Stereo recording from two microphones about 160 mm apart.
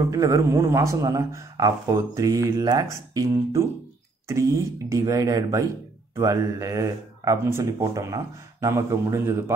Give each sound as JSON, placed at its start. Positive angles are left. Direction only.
{"t": 0.0, "sound": "a man's voice", "side_deg": -20}